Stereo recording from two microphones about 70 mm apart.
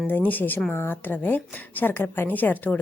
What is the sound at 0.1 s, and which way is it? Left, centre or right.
A woman's voice, left.